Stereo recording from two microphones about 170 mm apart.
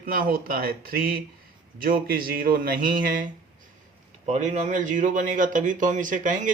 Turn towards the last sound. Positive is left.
turn(degrees=-50)  # may be behind; listen again after turning